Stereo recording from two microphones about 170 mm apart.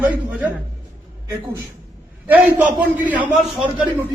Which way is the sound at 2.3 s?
10° right (ahead or behind).